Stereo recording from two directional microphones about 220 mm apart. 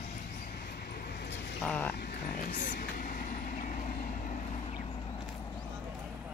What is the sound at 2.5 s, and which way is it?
Vehicle, 40° left (ahead or behind).